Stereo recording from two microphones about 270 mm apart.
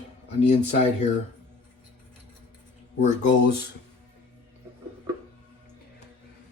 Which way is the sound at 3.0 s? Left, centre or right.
Left.